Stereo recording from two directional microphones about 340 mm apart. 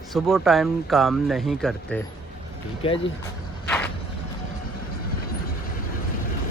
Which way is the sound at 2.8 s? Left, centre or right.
Centre.